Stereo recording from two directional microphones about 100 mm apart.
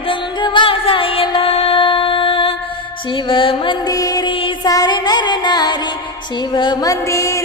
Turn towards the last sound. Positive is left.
turn(degrees=35)  # may be behind; listen again after turning